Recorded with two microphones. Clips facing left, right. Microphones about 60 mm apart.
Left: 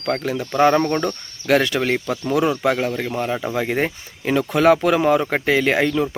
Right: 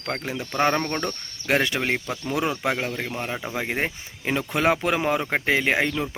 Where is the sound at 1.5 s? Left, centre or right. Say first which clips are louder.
Left 5 dB; right.